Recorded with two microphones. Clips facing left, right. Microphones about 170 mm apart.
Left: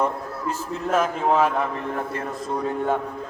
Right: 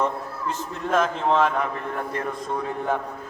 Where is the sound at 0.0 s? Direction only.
5° left (ahead or behind).